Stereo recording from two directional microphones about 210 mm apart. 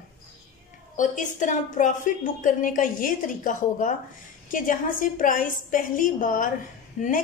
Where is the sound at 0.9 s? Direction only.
35° left (ahead or behind).